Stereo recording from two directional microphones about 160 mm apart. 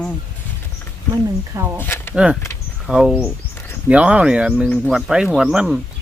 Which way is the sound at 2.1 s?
5° right (ahead or behind).